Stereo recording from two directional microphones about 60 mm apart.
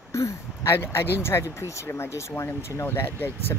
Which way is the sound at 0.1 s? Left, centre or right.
Left.